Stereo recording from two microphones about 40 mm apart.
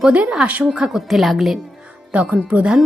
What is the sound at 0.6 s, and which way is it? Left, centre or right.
Speech, right.